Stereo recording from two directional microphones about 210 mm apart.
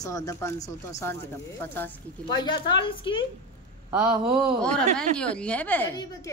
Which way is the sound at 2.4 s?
20° left (ahead or behind).